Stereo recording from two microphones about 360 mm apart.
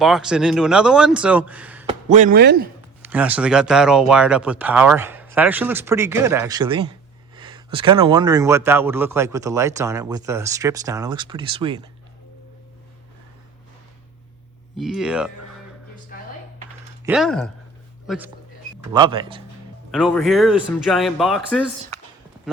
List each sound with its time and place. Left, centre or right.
0.0 s speech: centre
2.0 s speech: right
3.0 s a man's voice: centre
14.8 s speech: centre
17.1 s a man's voice: centre
18.9 s a man's voice: centre
19.9 s speech: centre